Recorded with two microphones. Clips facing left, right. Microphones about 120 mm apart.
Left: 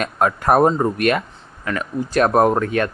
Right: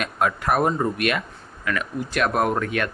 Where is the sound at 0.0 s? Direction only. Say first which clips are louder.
Left 4 dB; 40° left (ahead or behind).